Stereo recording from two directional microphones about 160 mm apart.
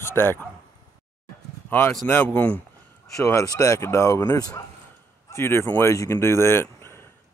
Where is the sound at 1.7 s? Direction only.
10° left (ahead or behind).